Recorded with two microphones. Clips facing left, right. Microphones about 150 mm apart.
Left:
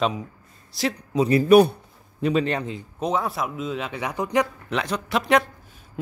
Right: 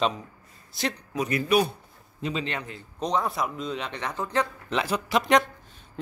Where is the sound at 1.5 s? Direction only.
55° left (ahead or behind).